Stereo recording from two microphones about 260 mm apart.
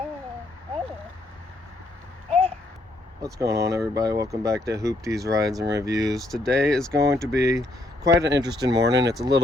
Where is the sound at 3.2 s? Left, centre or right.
Centre.